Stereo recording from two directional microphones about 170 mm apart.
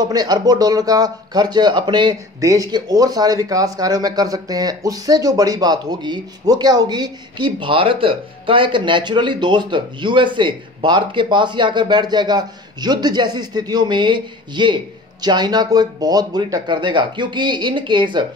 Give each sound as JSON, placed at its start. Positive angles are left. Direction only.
{"t": 0.0, "sound": "a man's voice", "side_deg": -20}